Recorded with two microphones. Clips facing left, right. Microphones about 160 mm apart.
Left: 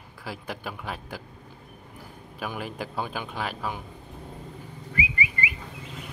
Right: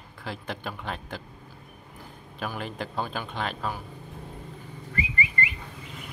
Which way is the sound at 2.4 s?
10° left (ahead or behind).